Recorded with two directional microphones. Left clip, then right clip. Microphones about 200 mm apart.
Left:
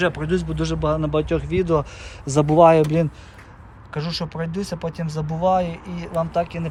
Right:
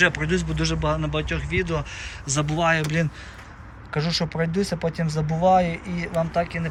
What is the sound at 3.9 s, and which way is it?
Speech, centre (ahead or behind).